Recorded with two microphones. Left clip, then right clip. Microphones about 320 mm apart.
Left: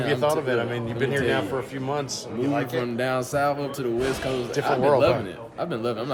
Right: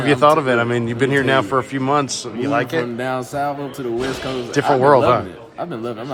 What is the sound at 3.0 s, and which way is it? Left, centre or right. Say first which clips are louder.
Speech: right 2 dB; centre.